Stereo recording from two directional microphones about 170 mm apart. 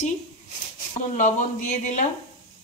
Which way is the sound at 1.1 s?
45° left (ahead or behind).